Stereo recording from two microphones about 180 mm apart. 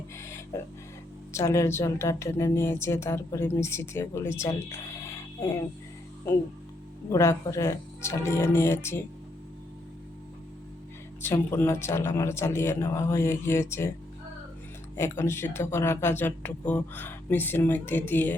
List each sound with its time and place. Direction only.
0.2 s music: 15° left (ahead or behind)
1.3 s speech: 15° left (ahead or behind)
7.1 s speech: 15° left (ahead or behind)
11.2 s speech: 15° left (ahead or behind)
14.9 s speech: 15° left (ahead or behind)